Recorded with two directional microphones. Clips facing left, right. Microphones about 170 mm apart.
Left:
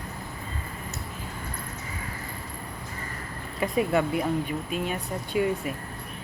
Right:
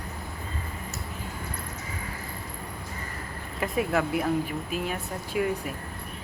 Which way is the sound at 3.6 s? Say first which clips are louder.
Left 2 dB; centre (ahead or behind).